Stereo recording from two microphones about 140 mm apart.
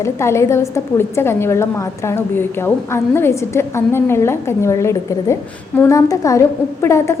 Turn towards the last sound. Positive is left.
turn(degrees=20)  # may be behind; listen again after turning